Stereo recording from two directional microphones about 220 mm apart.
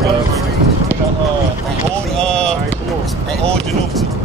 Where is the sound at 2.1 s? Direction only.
5° left (ahead or behind).